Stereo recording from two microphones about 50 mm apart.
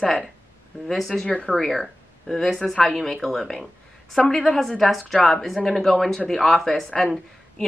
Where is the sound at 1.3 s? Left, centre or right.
Left.